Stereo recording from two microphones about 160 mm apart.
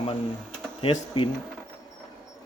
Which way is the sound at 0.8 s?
35° left (ahead or behind).